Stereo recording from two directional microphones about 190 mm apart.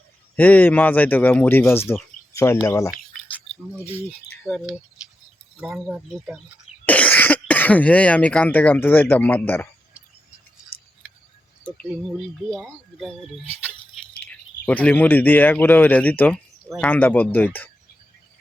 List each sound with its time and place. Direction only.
0.3 s speech: 10° left (ahead or behind)
3.9 s speech: 5° left (ahead or behind)
6.8 s speech: 10° left (ahead or behind)
10.7 s scissors: 50° left (ahead or behind)
11.6 s speech: 10° left (ahead or behind)